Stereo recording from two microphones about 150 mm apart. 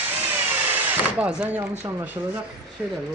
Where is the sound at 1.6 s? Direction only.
15° right (ahead or behind).